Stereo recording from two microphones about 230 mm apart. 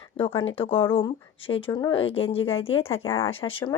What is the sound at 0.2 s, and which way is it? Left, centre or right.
Speech, left.